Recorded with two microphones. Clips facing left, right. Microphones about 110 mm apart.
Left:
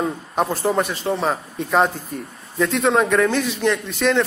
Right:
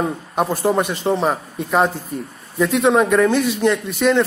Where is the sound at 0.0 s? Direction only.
10° right (ahead or behind).